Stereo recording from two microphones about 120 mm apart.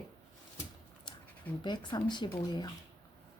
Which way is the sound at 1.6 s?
40° left (ahead or behind).